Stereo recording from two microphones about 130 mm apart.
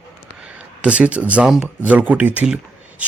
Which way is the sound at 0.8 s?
10° right (ahead or behind).